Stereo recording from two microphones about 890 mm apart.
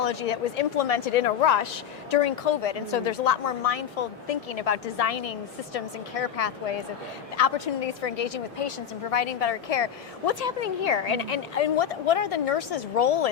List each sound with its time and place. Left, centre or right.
0.0 s a woman's voice: left